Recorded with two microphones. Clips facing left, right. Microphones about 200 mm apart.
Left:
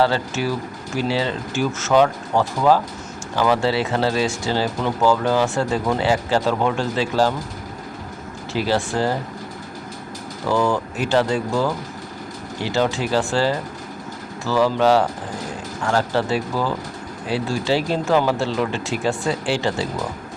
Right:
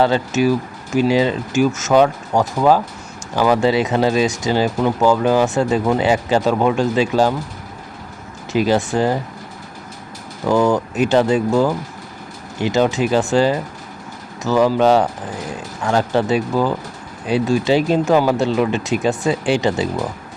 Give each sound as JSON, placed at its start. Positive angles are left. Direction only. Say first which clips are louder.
{"t": 0.0, "sound": "speech", "louder": "right 4 dB", "side_deg": -15}
{"t": 8.5, "sound": "speech", "louder": "right 5 dB", "side_deg": -15}
{"t": 10.5, "sound": "speech", "louder": "right 4 dB", "side_deg": -15}